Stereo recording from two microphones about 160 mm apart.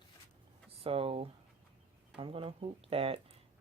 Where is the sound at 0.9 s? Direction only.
35° right (ahead or behind).